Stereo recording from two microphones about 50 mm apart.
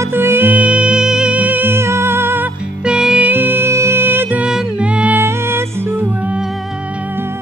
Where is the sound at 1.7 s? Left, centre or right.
Right.